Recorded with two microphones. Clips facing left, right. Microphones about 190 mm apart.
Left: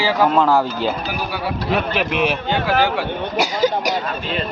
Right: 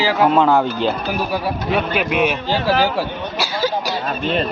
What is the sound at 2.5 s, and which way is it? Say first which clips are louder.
Speech: right 1 dB; 30° right (ahead or behind).